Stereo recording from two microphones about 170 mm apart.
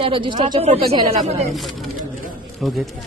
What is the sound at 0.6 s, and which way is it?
Speech, 35° right (ahead or behind).